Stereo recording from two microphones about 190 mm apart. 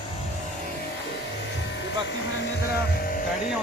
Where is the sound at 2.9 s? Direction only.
50° left (ahead or behind).